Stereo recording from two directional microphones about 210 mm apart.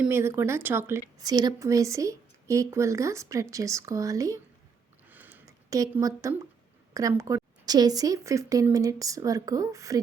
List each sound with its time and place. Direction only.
0.0 s speech: 10° right (ahead or behind)
5.0 s a sound: 10° right (ahead or behind)
6.9 s speech: 15° right (ahead or behind)